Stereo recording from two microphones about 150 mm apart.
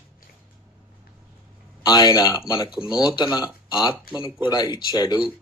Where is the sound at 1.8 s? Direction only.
25° left (ahead or behind).